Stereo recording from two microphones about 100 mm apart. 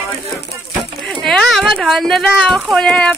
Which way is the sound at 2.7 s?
5° left (ahead or behind).